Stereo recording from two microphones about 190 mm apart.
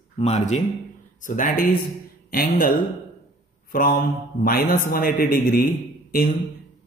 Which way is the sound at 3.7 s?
50° left (ahead or behind).